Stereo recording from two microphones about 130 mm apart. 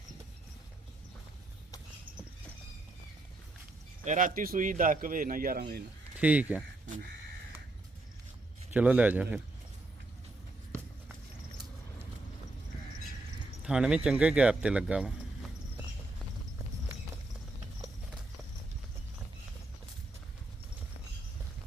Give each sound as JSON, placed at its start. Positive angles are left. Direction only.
{"t": 4.0, "sound": "speech", "side_deg": -80}
{"t": 6.1, "sound": "speech", "side_deg": -10}
{"t": 8.7, "sound": "speech", "side_deg": -10}
{"t": 13.7, "sound": "speech", "side_deg": -5}